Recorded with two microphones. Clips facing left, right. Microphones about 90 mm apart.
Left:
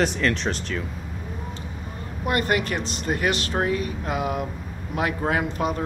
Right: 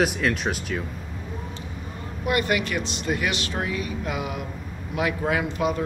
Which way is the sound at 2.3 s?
45° left (ahead or behind).